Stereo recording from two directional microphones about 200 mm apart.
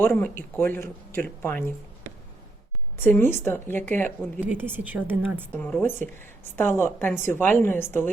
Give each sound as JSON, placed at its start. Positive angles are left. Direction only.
{"t": 0.0, "sound": "speech", "side_deg": 10}
{"t": 3.0, "sound": "speech", "side_deg": 10}
{"t": 4.4, "sound": "a woman's voice", "side_deg": -10}
{"t": 5.5, "sound": "speech", "side_deg": 5}